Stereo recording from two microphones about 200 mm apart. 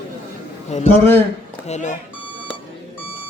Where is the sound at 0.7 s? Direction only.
35° left (ahead or behind).